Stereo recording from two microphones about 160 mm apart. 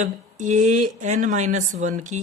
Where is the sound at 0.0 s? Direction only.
50° right (ahead or behind).